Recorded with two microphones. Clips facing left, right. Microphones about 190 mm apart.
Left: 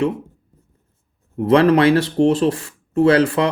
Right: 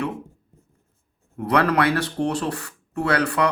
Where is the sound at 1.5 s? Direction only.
25° left (ahead or behind).